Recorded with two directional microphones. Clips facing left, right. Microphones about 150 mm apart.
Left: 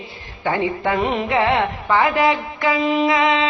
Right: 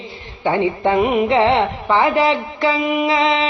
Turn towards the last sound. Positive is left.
turn(degrees=-25)  # may be behind; listen again after turning